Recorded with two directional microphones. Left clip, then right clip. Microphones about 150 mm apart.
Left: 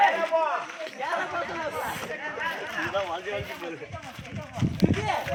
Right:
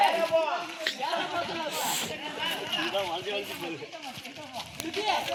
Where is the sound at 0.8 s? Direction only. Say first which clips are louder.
Even; centre (ahead or behind).